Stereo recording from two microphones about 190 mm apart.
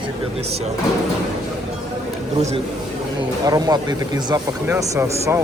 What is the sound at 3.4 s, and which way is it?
Speech, 20° right (ahead or behind).